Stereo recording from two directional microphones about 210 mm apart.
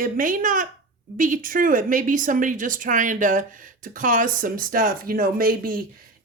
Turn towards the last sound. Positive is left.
turn(degrees=-40)  # may be behind; listen again after turning